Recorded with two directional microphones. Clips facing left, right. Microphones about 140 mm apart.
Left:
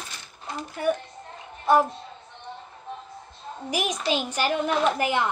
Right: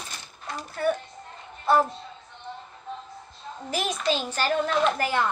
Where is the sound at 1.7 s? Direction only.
15° left (ahead or behind).